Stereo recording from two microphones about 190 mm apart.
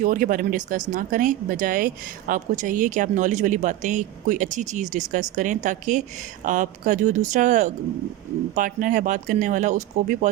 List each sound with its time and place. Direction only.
0.0 s a woman's voice: 45° right (ahead or behind)